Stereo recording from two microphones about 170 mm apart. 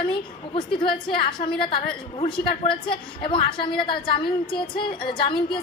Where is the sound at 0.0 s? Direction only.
30° left (ahead or behind).